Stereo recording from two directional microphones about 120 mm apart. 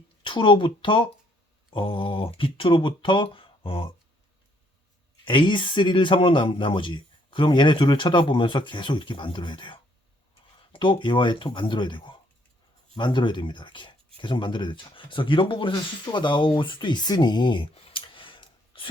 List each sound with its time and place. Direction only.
0.2 s speech: 40° left (ahead or behind)
5.2 s speech: 40° left (ahead or behind)